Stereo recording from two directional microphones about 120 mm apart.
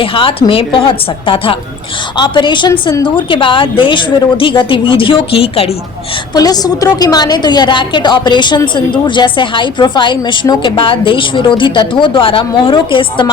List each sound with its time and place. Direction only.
0.0 s a woman's voice: 50° left (ahead or behind)
6.3 s a woman's voice: 35° left (ahead or behind)